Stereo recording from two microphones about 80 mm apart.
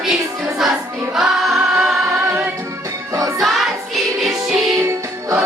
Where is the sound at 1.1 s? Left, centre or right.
Centre.